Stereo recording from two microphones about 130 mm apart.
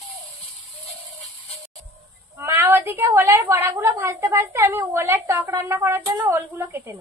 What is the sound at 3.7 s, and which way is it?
A woman's voice, 20° right (ahead or behind).